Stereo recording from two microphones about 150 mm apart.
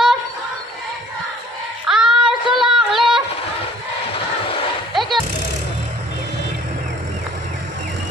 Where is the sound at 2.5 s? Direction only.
Centre (ahead or behind).